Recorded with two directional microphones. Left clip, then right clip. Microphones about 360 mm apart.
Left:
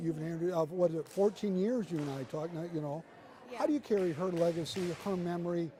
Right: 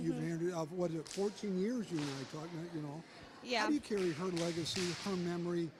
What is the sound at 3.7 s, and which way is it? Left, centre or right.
Speech, centre.